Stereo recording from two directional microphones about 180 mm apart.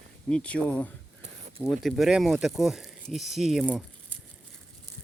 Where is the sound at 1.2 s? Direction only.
40° right (ahead or behind).